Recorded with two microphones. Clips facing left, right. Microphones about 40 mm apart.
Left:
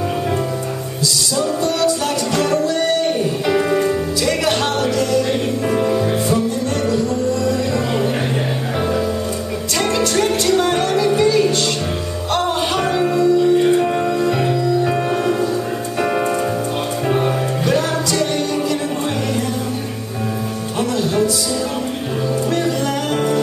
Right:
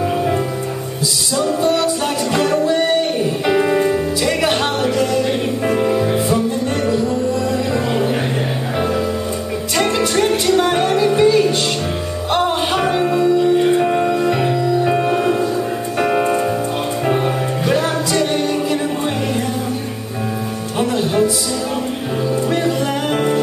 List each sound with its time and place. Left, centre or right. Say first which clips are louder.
1.4 s music: right 2 dB; centre
9.8 s music: right 1 dB; centre
23.1 s jingle bell: right 1 dB; centre